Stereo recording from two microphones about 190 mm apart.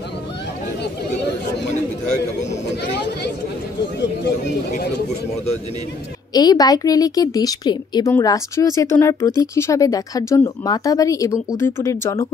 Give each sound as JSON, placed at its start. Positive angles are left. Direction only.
{"t": 2.9, "sound": "speech", "side_deg": 65}
{"t": 6.3, "sound": "a woman's voice", "side_deg": 20}